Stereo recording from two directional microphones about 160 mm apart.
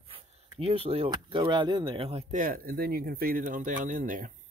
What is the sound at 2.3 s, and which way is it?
Speech, 60° right (ahead or behind).